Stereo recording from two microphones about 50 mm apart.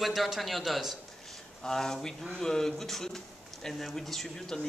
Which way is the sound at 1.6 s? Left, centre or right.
Centre.